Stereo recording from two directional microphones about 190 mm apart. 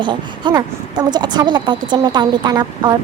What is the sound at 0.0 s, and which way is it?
A woman's voice, 25° right (ahead or behind).